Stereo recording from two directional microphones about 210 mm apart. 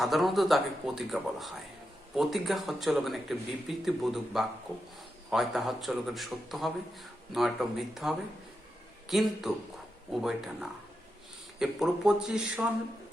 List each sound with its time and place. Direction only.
0.0 s a man's voice: centre (ahead or behind)